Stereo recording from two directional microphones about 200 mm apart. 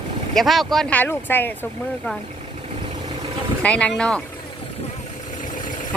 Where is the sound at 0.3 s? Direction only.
Centre (ahead or behind).